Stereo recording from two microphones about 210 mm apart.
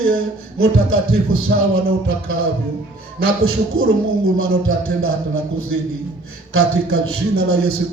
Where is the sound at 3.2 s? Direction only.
85° right.